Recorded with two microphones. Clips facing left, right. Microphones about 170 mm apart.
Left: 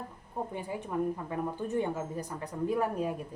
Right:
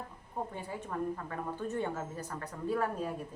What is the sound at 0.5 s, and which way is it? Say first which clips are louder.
A woman's voice: left 5 dB; 15° left (ahead or behind).